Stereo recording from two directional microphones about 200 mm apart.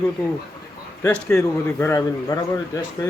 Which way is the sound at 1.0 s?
10° left (ahead or behind).